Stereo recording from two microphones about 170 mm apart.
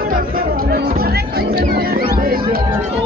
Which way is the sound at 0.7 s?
60° right (ahead or behind).